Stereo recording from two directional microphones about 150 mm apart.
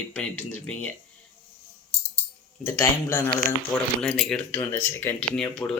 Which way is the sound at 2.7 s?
20° left (ahead or behind).